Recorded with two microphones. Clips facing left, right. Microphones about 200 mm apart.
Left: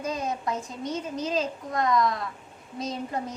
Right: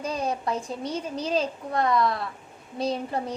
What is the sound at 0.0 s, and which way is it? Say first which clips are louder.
A woman's voice: right 2 dB; 30° right (ahead or behind).